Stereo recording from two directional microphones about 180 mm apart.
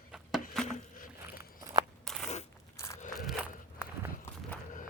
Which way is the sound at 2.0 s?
Centre (ahead or behind).